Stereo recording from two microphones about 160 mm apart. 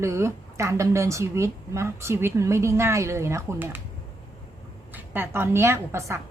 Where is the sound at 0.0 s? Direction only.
15° right (ahead or behind).